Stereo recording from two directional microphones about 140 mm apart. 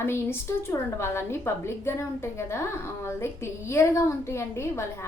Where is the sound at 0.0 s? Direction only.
15° left (ahead or behind).